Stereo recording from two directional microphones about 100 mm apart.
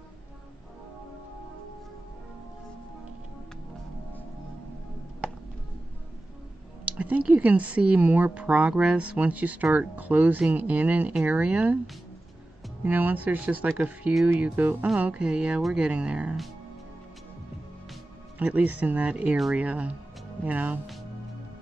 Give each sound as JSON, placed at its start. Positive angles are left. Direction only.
{"t": 6.8, "sound": "speech", "side_deg": -15}
{"t": 12.8, "sound": "speech", "side_deg": -15}
{"t": 18.4, "sound": "speech", "side_deg": -15}
{"t": 19.3, "sound": "speech", "side_deg": 0}
{"t": 19.6, "sound": "speech", "side_deg": -15}